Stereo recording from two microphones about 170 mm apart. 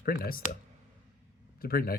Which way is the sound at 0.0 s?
60° left (ahead or behind).